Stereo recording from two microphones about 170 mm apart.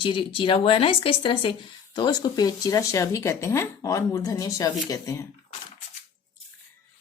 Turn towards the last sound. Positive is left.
turn(degrees=20)  # may be behind; listen again after turning